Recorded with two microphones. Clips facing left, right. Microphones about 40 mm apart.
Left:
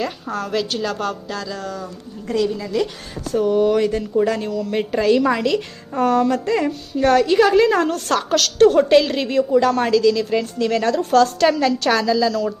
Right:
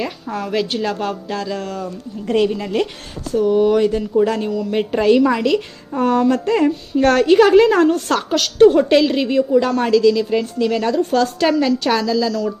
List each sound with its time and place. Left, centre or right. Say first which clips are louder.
0.3 s a woman's voice: right 3 dB; centre
1.4 s a sound: right 4 dB; right
2.3 s a woman's voice: right 3 dB; right
3.3 s a woman's voice: right 2 dB; centre
5.2 s a woman's voice: right 2 dB; centre
6.0 s a woman's voice: right 1 dB; right
7.0 s a sound: right 1 dB; right
7.3 s a woman's voice: right 4 dB; right
8.7 s a woman's voice: even; centre